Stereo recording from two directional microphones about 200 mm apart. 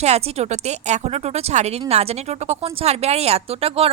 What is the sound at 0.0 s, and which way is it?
Speech, 30° right (ahead or behind).